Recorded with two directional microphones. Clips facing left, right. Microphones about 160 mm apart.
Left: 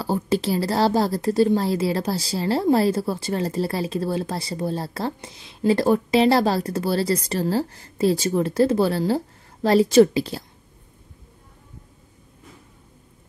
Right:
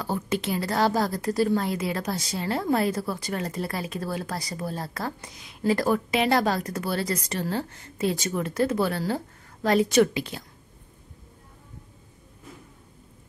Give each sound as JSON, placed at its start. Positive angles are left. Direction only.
{"t": 0.0, "sound": "a woman's voice", "side_deg": 30}